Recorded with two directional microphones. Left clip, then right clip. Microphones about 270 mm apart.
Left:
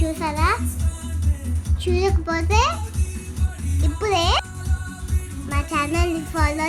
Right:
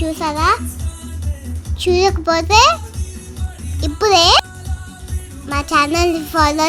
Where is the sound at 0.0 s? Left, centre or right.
Right.